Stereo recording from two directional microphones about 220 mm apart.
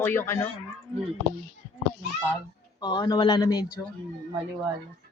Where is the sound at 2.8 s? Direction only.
20° left (ahead or behind).